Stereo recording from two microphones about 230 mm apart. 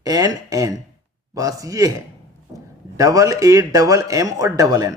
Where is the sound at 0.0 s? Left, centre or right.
Centre.